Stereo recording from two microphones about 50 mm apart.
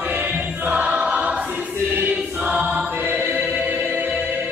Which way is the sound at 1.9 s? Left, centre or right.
Right.